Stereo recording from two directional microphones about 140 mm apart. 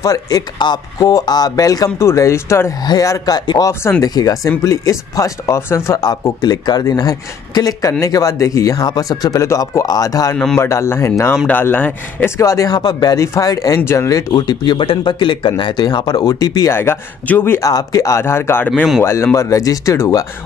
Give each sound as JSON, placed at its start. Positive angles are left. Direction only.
{"t": 0.0, "sound": "speech", "side_deg": 25}
{"t": 10.3, "sound": "speech", "side_deg": 5}
{"t": 10.6, "sound": "a man's voice", "side_deg": 20}
{"t": 18.7, "sound": "speech", "side_deg": 0}
{"t": 19.0, "sound": "speech", "side_deg": 20}